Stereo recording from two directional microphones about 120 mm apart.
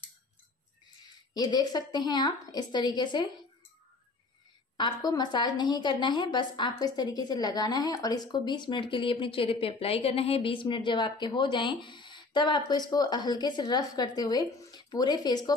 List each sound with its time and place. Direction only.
1.0 s a woman's voice: 35° left (ahead or behind)
4.7 s a woman's voice: 35° left (ahead or behind)